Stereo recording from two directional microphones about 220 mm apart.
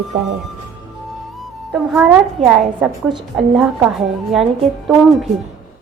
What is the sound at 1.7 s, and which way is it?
A woman's voice, 5° right (ahead or behind).